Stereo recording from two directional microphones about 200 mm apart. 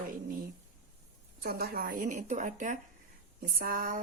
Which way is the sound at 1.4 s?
50° right (ahead or behind).